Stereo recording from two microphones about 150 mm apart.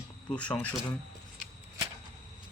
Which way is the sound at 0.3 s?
10° left (ahead or behind).